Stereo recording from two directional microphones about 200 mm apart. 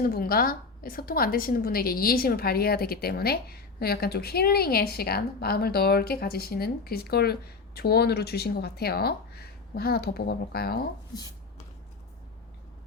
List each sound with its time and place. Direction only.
0.1 s a woman's voice: 45° left (ahead or behind)